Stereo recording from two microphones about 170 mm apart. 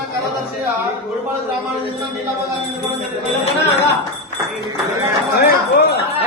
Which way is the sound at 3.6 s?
40° left (ahead or behind).